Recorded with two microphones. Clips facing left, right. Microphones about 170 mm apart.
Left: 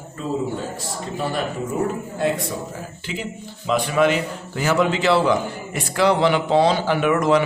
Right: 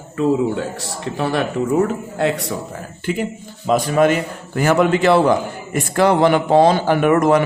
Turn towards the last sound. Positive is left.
turn(degrees=-50)  # may be behind; listen again after turning